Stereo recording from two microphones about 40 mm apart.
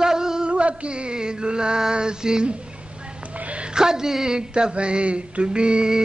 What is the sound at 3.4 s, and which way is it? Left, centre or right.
Music, right.